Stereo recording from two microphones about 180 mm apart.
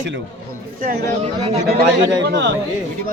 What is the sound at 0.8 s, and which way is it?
Speech, 55° right (ahead or behind).